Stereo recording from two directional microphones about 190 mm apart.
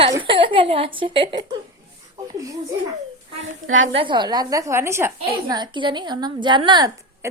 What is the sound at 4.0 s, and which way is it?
A woman's voice, 25° right (ahead or behind).